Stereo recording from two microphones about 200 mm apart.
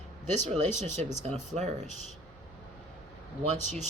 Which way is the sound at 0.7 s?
35° right (ahead or behind).